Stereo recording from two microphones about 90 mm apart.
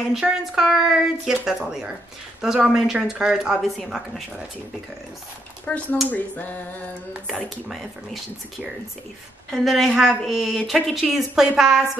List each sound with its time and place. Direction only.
0.1 s a woman's voice: centre (ahead or behind)
5.7 s speech: 15° left (ahead or behind)
6.0 s a sound: 20° left (ahead or behind)
7.2 s a woman's voice: centre (ahead or behind)